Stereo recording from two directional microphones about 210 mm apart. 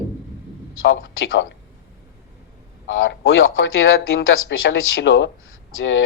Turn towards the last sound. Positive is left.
turn(degrees=65)  # may be behind; listen again after turning